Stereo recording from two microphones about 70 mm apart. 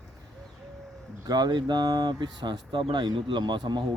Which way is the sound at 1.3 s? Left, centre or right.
Right.